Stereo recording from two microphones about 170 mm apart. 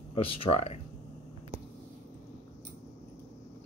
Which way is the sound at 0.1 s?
35° left (ahead or behind).